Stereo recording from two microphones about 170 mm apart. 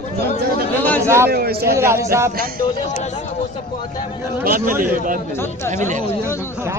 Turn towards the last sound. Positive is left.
turn(degrees=-45)  # may be behind; listen again after turning